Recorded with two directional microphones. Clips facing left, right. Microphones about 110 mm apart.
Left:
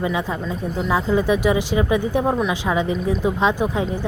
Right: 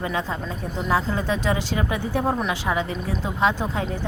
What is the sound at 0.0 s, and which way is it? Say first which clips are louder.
Speech: left 4 dB; 15° left (ahead or behind).